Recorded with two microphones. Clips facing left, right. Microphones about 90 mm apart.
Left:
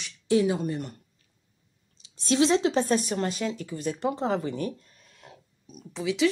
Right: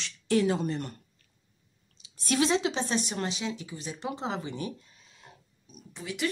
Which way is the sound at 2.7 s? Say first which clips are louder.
Left 6 dB; 45° left (ahead or behind).